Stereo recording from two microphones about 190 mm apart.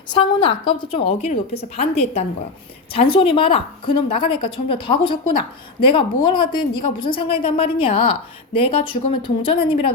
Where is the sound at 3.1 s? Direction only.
30° left (ahead or behind).